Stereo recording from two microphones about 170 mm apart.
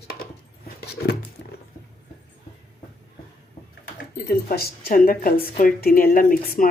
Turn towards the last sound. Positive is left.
turn(degrees=55)  # may be behind; listen again after turning